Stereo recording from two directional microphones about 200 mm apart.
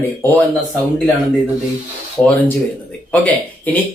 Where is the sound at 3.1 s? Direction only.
10° left (ahead or behind).